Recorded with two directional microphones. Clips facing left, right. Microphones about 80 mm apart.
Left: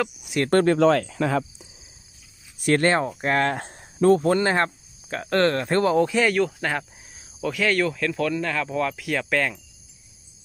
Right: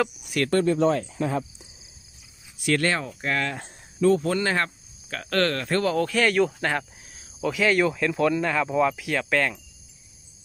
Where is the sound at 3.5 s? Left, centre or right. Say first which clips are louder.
Left 3 dB; left.